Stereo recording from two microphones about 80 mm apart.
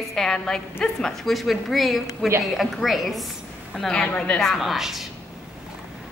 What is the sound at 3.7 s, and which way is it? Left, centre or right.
Speech, centre.